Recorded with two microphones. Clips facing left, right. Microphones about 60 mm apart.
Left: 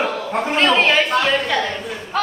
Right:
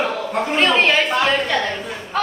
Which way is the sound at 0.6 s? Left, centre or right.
Centre.